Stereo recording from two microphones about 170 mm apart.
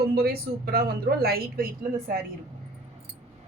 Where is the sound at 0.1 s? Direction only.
65° right (ahead or behind).